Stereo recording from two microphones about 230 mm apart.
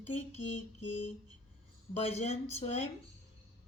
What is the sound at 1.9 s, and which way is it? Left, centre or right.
Speech, left.